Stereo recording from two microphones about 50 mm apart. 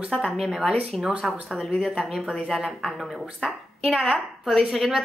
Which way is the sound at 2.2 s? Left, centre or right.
Centre.